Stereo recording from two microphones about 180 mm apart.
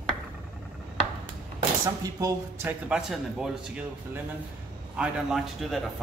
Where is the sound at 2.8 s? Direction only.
5° right (ahead or behind).